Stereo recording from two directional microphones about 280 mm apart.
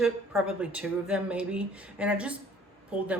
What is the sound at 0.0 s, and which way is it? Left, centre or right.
A woman's voice, centre.